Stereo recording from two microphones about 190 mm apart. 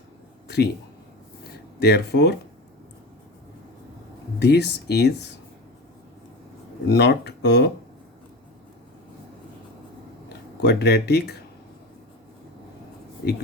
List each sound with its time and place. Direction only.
0.4 s a sound: 60° left (ahead or behind)
1.8 s speech: 60° left (ahead or behind)
4.4 s speech: 60° left (ahead or behind)
6.8 s speech: 60° left (ahead or behind)
10.6 s speech: 60° left (ahead or behind)